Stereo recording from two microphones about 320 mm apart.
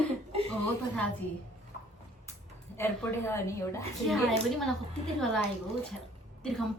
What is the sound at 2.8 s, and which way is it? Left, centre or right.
A woman's voice, centre.